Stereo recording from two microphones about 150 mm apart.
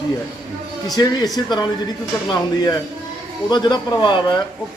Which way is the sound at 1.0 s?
25° left (ahead or behind).